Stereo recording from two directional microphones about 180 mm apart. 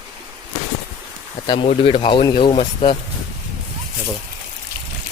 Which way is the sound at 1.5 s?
30° left (ahead or behind).